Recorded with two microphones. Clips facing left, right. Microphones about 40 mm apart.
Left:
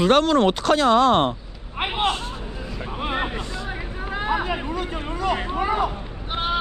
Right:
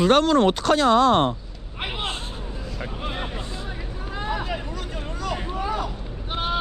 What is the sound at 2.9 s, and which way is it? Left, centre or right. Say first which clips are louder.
A man's voice: left 8 dB; left.